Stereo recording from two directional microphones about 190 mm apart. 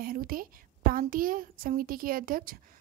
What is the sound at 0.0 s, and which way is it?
A woman's voice, 50° right (ahead or behind).